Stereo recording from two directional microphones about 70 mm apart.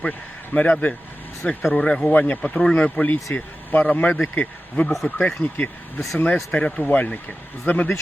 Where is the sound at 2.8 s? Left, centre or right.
Left.